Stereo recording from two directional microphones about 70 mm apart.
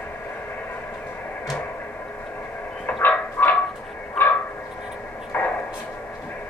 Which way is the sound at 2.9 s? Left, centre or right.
Left.